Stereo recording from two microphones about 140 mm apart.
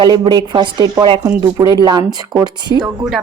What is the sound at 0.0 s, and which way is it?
Speech, 30° right (ahead or behind).